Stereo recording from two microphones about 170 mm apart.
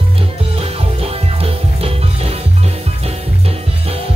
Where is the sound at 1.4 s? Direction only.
35° right (ahead or behind).